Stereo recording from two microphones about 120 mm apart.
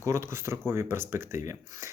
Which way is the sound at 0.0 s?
20° right (ahead or behind).